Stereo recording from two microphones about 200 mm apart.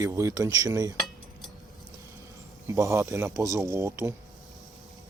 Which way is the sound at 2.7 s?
15° right (ahead or behind).